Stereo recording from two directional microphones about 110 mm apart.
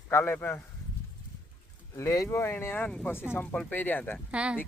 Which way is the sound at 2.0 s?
25° left (ahead or behind).